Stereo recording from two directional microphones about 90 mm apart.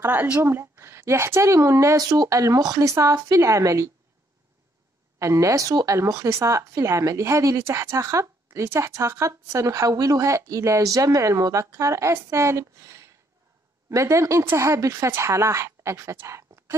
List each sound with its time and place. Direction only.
0.0 s a woman's voice: 20° right (ahead or behind); by 3.9 s 35° right (ahead or behind)
5.2 s a woman's voice: 35° right (ahead or behind)